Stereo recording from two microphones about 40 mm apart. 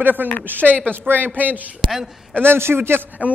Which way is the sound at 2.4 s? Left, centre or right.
Right.